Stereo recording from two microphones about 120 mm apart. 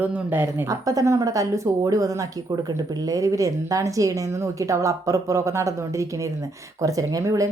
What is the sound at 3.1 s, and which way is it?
Speech, 30° right (ahead or behind).